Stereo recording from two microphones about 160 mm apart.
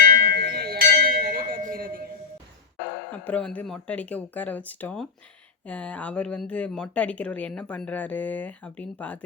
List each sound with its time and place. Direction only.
0.0 s music: 60° right (ahead or behind)
3.1 s a woman's voice: 10° left (ahead or behind)